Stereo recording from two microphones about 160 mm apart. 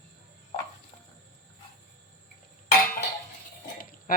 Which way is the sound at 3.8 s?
60° left (ahead or behind).